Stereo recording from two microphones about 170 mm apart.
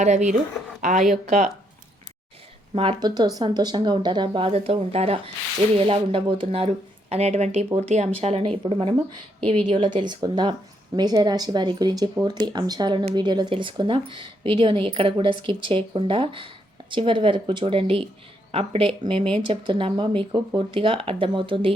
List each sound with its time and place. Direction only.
0.0 s speech: 45° right (ahead or behind)
2.7 s a woman's voice: 25° right (ahead or behind)